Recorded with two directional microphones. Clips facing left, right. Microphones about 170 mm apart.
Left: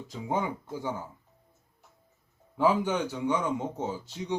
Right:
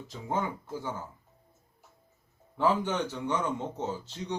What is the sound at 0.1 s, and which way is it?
Speech, 15° left (ahead or behind).